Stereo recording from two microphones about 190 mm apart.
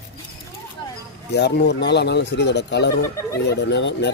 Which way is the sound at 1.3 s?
60° left (ahead or behind).